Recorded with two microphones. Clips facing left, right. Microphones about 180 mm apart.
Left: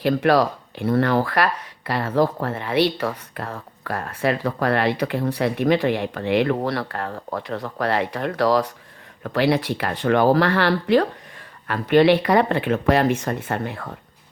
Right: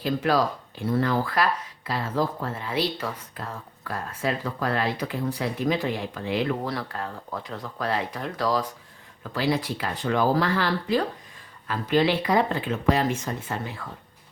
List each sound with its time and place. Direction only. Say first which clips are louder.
0.0 s speech: left 6 dB; 65° left (ahead or behind)